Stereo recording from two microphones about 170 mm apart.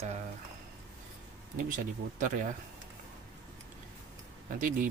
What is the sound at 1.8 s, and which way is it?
Speech, 55° right (ahead or behind).